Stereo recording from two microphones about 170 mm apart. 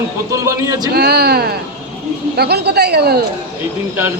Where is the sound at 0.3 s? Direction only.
20° right (ahead or behind).